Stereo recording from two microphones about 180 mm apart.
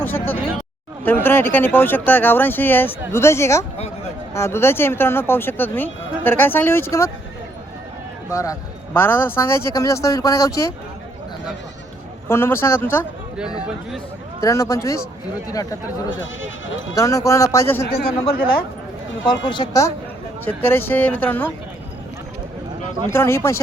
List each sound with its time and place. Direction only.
0.0 s speech: 10° left (ahead or behind)
8.3 s speech: 15° left (ahead or behind)
12.3 s speech: 15° left (ahead or behind)
14.4 s speech: 20° left (ahead or behind)
16.2 s speech: 90° left
16.9 s a man's voice: 20° left (ahead or behind)
17.9 s speech: 30° left (ahead or behind)
19.5 s a man's voice: 20° left (ahead or behind)
20.4 s speech: 10° left (ahead or behind)
23.1 s speech: 15° left (ahead or behind)